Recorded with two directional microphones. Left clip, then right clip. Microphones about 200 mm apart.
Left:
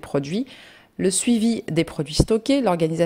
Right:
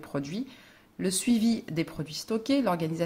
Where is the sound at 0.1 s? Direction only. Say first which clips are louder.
Left 10 dB; 35° left (ahead or behind).